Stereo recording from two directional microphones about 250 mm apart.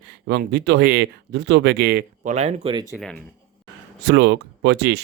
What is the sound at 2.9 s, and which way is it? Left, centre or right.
Speech, centre.